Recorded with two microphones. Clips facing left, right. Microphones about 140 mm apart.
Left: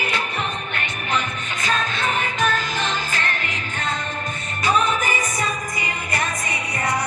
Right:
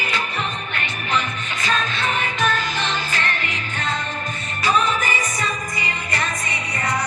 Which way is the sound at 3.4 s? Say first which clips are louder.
Right 1 dB; 45° left (ahead or behind).